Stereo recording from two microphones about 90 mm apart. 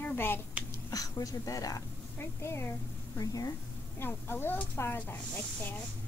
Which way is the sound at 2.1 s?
30° left (ahead or behind).